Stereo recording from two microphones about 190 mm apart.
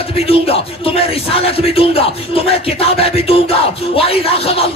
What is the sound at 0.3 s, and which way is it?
Speech, 30° left (ahead or behind).